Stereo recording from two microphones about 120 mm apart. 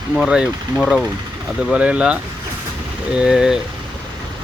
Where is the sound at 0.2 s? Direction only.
5° right (ahead or behind).